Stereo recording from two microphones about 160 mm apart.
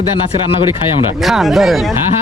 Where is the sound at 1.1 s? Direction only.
Centre (ahead or behind).